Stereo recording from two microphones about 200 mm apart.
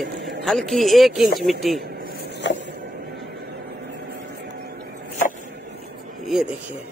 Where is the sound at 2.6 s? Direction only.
55° right (ahead or behind).